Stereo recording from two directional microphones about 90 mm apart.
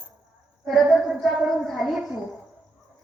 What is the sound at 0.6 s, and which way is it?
A woman's voice, centre (ahead or behind).